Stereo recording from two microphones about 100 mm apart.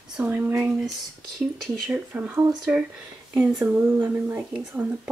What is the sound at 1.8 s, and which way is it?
Speech, 10° right (ahead or behind).